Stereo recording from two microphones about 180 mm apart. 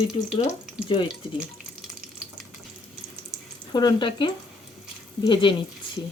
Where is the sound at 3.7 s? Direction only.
25° left (ahead or behind).